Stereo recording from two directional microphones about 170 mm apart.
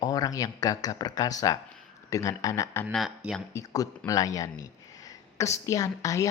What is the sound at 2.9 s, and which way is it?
Speech, centre (ahead or behind).